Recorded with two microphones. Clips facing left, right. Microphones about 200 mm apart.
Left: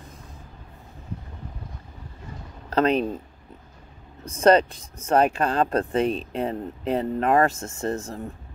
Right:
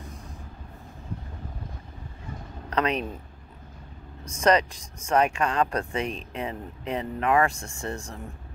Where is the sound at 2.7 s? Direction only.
30° left (ahead or behind).